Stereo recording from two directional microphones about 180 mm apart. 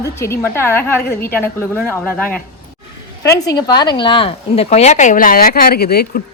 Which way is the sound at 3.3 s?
20° left (ahead or behind).